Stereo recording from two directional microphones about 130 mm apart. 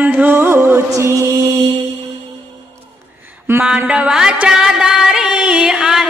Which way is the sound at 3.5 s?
15° right (ahead or behind).